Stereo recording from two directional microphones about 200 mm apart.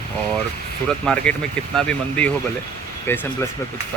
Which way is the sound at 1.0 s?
5° left (ahead or behind).